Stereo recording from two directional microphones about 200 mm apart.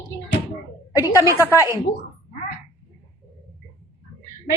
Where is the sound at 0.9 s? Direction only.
15° left (ahead or behind).